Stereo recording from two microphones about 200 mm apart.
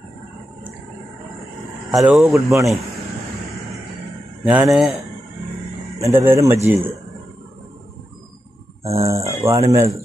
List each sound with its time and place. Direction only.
1.9 s speech: centre (ahead or behind)
2.2 s speech: 15° right (ahead or behind)
4.5 s speech: 10° right (ahead or behind)
5.9 s speech: 15° right (ahead or behind)
8.8 s speech: 15° right (ahead or behind)